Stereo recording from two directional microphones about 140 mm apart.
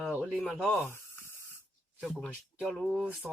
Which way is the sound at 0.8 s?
15° left (ahead or behind).